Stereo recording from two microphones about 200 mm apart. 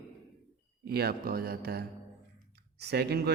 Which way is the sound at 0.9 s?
50° right (ahead or behind).